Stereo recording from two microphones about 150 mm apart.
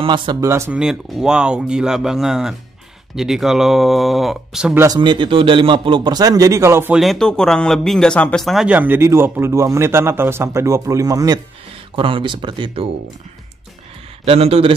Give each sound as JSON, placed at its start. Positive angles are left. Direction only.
{"t": 0.0, "sound": "speech", "side_deg": -35}
{"t": 0.5, "sound": "speech", "side_deg": -15}
{"t": 0.7, "sound": "speech", "side_deg": -5}
{"t": 4.7, "sound": "a man's voice", "side_deg": -25}
{"t": 7.0, "sound": "speech", "side_deg": 0}
{"t": 11.9, "sound": "speech", "side_deg": -35}
{"t": 14.2, "sound": "speech", "side_deg": -40}